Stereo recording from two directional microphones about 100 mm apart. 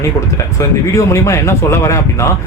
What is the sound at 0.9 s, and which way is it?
A man's voice, 30° left (ahead or behind).